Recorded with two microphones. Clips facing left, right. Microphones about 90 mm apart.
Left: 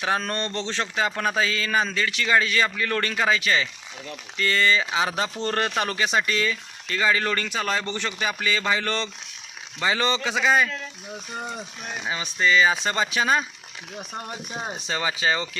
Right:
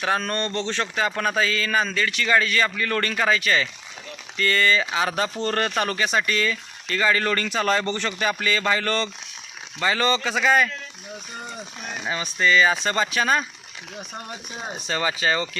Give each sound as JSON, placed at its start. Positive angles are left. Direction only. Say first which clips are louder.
{"t": 0.0, "sound": "speech", "louder": "right 1 dB", "side_deg": 20}
{"t": 11.9, "sound": "speech", "louder": "right 1 dB", "side_deg": 15}
{"t": 14.8, "sound": "speech", "louder": "right 3 dB", "side_deg": 15}